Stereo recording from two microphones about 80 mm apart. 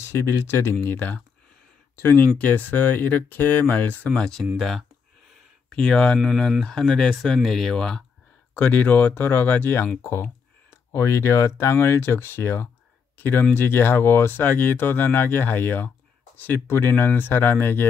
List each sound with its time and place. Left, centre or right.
0.1 s speech: left; by 4.5 s centre
4.6 s speech: centre
5.7 s speech: centre
8.5 s speech: centre
10.9 s speech: left